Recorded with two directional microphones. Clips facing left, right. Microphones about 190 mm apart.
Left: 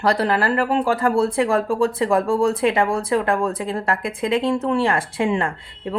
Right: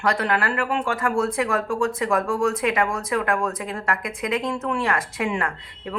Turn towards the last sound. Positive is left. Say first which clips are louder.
# left 3 dB
turn(degrees=30)  # may be behind; listen again after turning